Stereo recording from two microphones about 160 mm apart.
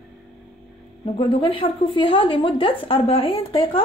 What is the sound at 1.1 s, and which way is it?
Speech, 35° left (ahead or behind).